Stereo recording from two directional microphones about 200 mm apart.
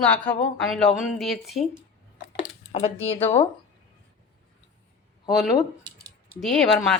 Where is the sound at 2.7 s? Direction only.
30° left (ahead or behind).